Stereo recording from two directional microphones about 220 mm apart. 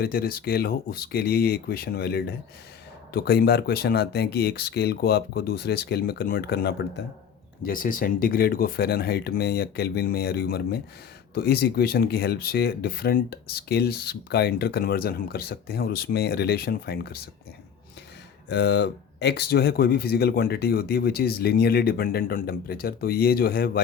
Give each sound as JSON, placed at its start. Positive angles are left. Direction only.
{"t": 0.0, "sound": "speech", "side_deg": 45}
{"t": 18.4, "sound": "speech", "side_deg": 50}